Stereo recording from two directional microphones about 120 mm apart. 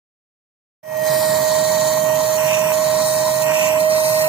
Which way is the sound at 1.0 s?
Centre (ahead or behind).